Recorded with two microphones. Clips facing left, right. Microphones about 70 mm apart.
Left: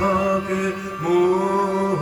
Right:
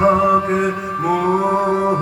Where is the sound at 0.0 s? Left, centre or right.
Right.